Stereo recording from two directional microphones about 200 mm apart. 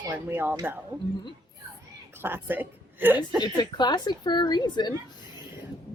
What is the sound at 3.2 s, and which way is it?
A woman's voice, 20° left (ahead or behind).